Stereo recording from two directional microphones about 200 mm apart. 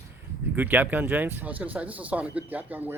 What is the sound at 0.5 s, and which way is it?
Speech, 10° right (ahead or behind).